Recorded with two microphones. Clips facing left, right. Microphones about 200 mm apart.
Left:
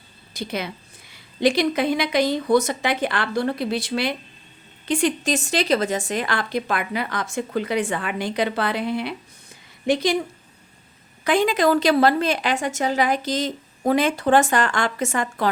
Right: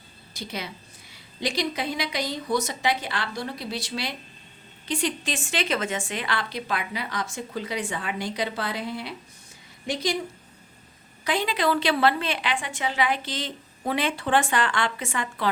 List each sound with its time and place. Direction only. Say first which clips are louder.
0.3 s speech: left 6 dB; 55° left (ahead or behind)
11.2 s a woman's voice: left 7 dB; 50° left (ahead or behind)